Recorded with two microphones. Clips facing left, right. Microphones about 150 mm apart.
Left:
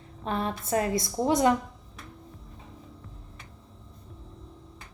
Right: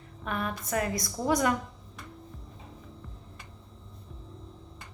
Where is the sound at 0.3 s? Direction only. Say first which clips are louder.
Left 4 dB; 30° left (ahead or behind).